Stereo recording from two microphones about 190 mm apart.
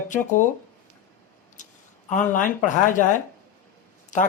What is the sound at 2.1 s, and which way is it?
Speech, 40° left (ahead or behind).